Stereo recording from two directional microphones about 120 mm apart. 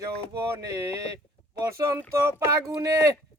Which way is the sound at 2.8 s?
25° right (ahead or behind).